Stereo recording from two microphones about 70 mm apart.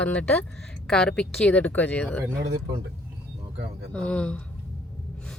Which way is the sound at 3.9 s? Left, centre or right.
Centre.